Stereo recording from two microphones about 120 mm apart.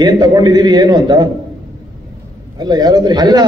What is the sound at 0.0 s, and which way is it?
A man's voice, 30° right (ahead or behind).